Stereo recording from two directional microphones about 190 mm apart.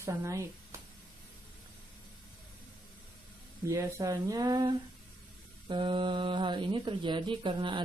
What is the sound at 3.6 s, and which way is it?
Speech, 20° right (ahead or behind).